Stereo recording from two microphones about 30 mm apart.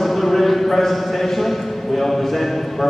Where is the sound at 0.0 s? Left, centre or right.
Centre.